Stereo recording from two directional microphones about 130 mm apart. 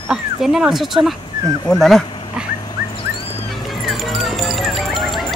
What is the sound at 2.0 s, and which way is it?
Dog, 40° left (ahead or behind).